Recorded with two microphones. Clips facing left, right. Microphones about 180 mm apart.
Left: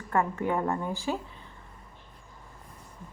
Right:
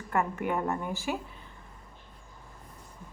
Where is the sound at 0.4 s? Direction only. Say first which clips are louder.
Left 2 dB; 25° left (ahead or behind).